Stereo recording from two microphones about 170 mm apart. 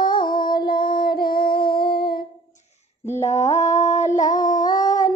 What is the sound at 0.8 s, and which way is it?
Child singing, 60° left (ahead or behind).